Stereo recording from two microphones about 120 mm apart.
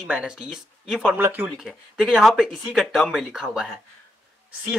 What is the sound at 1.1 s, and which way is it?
Speech, 15° right (ahead or behind).